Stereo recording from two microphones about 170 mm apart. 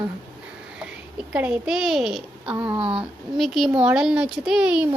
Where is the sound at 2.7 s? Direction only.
30° right (ahead or behind).